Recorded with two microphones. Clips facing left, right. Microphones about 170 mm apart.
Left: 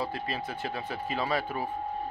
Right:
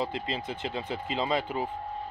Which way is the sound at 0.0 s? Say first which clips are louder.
Right 1 dB; 20° right (ahead or behind).